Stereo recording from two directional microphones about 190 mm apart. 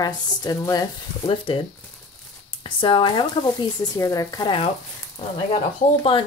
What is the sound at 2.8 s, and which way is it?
Speech, 25° left (ahead or behind).